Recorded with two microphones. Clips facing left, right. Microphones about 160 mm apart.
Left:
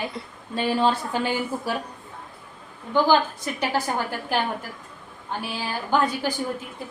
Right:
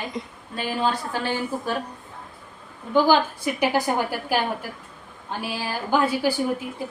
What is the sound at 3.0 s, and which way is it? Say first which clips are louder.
A woman's voice: right 1 dB; 10° right (ahead or behind).